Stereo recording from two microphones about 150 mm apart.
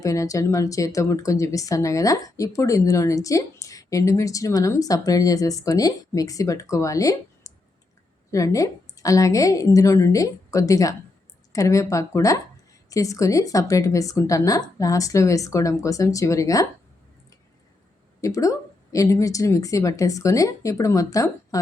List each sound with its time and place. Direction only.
0.0 s speech: 20° left (ahead or behind)
18.2 s speech: 20° left (ahead or behind)